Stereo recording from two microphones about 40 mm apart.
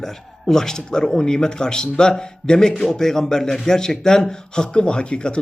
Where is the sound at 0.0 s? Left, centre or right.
Centre.